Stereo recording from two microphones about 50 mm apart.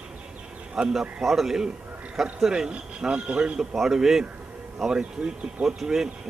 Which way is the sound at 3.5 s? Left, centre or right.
Centre.